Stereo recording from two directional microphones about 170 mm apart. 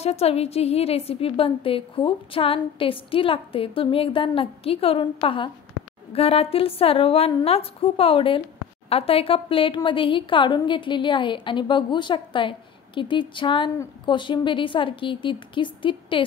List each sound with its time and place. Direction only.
0.0 s a woman's voice: 35° left (ahead or behind)